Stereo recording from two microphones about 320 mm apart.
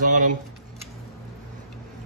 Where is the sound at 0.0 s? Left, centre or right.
Right.